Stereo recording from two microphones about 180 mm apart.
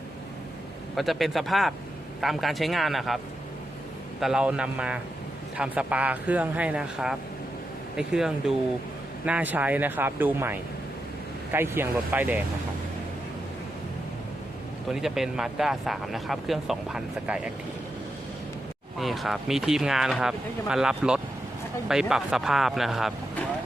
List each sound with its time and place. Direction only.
0.9 s speech: centre (ahead or behind)
4.2 s speech: 5° right (ahead or behind)
15.0 s speech: centre (ahead or behind)
18.9 s speech: centre (ahead or behind)